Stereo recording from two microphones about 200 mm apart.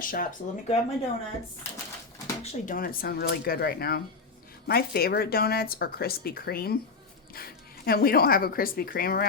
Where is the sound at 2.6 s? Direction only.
45° left (ahead or behind).